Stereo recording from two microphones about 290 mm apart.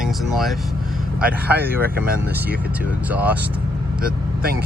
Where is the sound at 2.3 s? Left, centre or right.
Centre.